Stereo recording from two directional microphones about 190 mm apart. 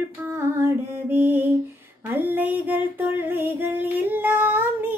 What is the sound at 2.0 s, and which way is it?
Female singing, 10° right (ahead or behind).